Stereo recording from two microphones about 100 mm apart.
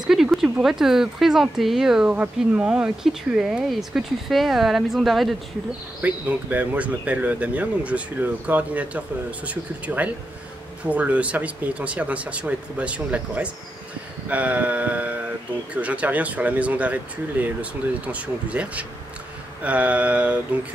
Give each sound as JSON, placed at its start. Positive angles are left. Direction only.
{"t": 0.0, "sound": "speech", "side_deg": -5}
{"t": 5.9, "sound": "speech", "side_deg": -15}